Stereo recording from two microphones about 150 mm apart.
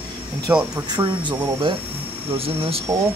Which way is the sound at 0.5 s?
5° right (ahead or behind).